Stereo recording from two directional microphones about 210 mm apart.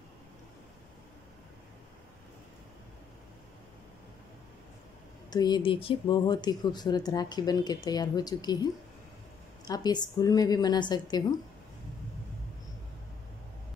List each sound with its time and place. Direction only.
5.3 s speech: 20° left (ahead or behind)
9.7 s speech: 20° left (ahead or behind)